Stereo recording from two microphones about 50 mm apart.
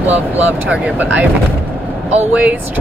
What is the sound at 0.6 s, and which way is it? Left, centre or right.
Speech, right.